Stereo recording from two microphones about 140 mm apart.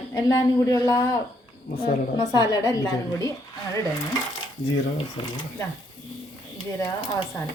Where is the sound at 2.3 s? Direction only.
25° left (ahead or behind).